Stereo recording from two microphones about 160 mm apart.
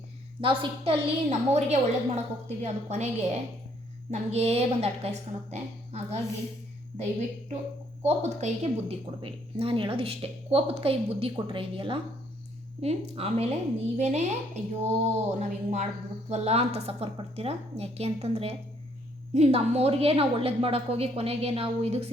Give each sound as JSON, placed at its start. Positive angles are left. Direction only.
{"t": 0.4, "sound": "a woman's voice", "side_deg": -35}
{"t": 4.1, "sound": "a woman's voice", "side_deg": -45}
{"t": 8.0, "sound": "a woman's voice", "side_deg": -45}